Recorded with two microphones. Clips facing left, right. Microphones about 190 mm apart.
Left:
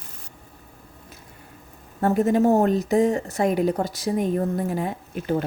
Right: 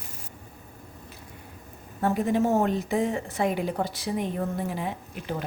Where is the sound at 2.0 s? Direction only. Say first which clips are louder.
Left 5 dB; 45° left (ahead or behind).